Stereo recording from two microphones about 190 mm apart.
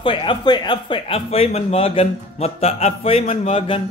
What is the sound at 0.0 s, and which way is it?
Speech, 25° left (ahead or behind).